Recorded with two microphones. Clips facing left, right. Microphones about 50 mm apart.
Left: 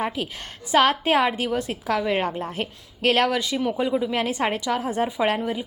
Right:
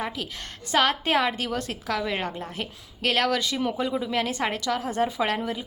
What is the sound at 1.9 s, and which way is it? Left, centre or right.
A woman's voice, left.